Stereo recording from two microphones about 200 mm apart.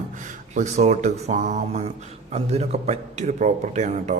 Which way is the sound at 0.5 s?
35° right (ahead or behind).